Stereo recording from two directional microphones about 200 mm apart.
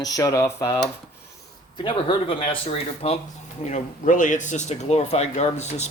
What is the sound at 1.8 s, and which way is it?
Speech, 25° left (ahead or behind).